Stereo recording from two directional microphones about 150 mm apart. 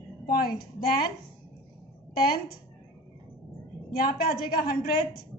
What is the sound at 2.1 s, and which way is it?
Speech, 90° left.